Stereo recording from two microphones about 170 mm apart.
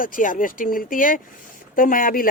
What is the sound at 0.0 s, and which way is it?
Speech, 50° left (ahead or behind).